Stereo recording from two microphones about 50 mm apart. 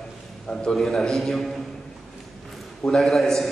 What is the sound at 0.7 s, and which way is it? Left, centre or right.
Speech, centre.